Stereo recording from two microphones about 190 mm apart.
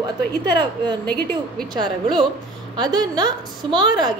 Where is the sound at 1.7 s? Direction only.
20° right (ahead or behind).